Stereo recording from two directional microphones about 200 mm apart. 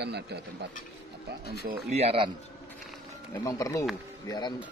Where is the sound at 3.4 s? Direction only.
15° left (ahead or behind).